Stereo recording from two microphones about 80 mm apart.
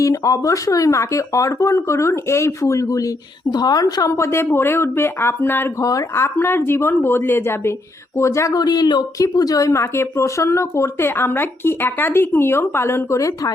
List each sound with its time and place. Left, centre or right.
0.0 s speech: left
3.5 s speech: left
8.5 s speech: left
9.3 s speech: left